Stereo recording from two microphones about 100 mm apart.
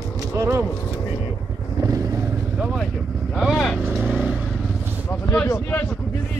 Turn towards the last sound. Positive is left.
turn(degrees=25)  # may be behind; listen again after turning